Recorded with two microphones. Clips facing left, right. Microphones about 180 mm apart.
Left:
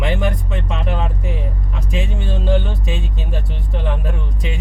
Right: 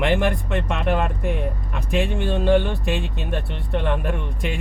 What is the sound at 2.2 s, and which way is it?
Music, 60° right (ahead or behind).